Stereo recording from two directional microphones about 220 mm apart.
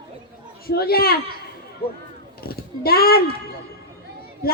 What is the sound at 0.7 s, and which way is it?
Speech, 45° left (ahead or behind).